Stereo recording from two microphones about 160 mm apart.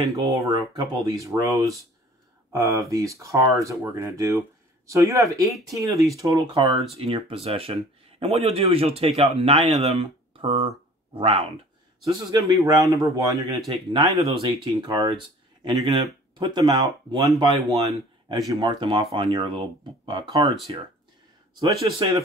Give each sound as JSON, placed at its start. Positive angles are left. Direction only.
{"t": 0.0, "sound": "speech", "side_deg": -20}
{"t": 12.0, "sound": "speech", "side_deg": -25}
{"t": 13.7, "sound": "speech", "side_deg": -30}
{"t": 21.5, "sound": "speech", "side_deg": -30}